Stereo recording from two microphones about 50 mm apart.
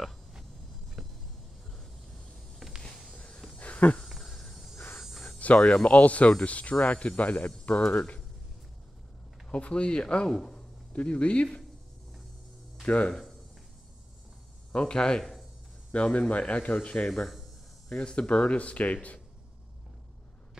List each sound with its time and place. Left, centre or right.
1.0 s insect: centre
1.7 s a sound: centre
3.1 s music: left
3.5 s a sound: left
4.1 s a sound: centre
4.7 s a sound: left
5.4 s speech: left
9.5 s speech: left
10.9 s speech: left
12.8 s speech: left
13.1 s speech: centre
14.7 s speech: centre
15.9 s speech: left